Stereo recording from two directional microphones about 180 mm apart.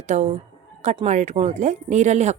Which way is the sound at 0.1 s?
40° right (ahead or behind).